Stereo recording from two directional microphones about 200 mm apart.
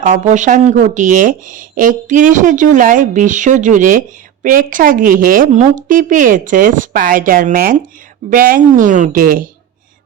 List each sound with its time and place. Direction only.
0.0 s a woman's voice: 40° right (ahead or behind)